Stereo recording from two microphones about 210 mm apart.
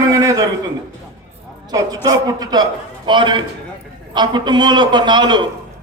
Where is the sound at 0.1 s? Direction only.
15° right (ahead or behind).